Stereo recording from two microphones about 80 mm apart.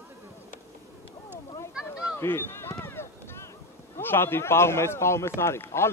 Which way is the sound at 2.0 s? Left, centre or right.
Left.